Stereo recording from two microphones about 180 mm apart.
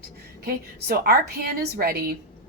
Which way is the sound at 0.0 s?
60° right (ahead or behind).